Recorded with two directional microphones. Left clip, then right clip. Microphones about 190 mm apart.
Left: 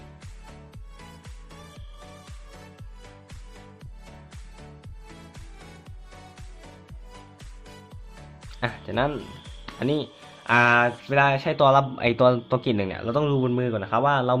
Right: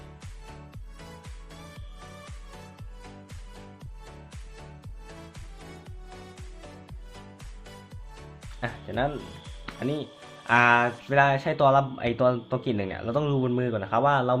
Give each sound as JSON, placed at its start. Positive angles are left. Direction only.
{"t": 8.6, "sound": "speech", "side_deg": 30}